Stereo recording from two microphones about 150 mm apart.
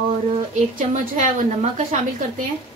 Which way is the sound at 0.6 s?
55° right (ahead or behind).